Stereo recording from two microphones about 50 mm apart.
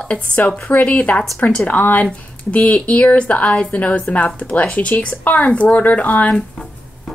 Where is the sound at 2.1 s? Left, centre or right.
Left.